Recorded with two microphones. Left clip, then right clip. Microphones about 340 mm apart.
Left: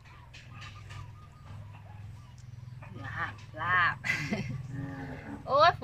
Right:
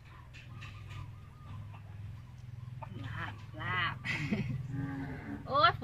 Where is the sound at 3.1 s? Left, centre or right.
Centre.